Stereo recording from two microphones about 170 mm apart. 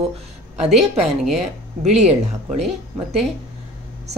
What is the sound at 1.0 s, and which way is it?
Speech, centre (ahead or behind).